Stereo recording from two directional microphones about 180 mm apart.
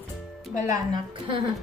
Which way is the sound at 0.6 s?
25° right (ahead or behind).